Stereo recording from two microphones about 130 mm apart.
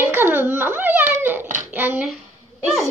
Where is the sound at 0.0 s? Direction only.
15° right (ahead or behind).